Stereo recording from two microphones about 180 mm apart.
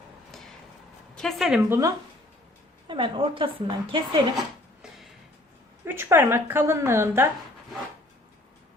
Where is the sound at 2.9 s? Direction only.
30° right (ahead or behind).